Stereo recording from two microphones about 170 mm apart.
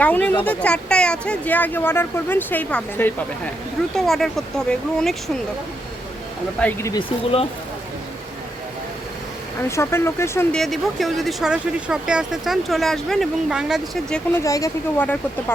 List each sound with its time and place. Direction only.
0.0 s speech: 10° left (ahead or behind)
6.6 s speech: 10° left (ahead or behind)
9.6 s speech: 15° left (ahead or behind)
10.5 s speech: centre (ahead or behind)
14.3 s speech: 20° left (ahead or behind)